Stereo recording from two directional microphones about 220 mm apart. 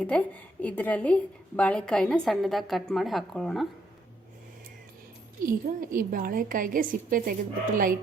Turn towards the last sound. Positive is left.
turn(degrees=-40)  # may be behind; listen again after turning